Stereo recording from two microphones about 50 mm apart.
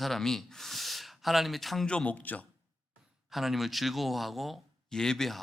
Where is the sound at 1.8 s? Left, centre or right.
Left.